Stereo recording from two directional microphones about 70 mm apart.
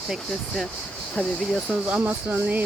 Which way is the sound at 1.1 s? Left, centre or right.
Centre.